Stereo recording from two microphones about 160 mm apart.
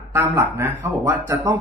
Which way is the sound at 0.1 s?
15° right (ahead or behind).